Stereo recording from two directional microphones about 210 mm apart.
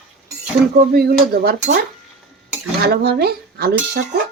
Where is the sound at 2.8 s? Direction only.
50° right (ahead or behind).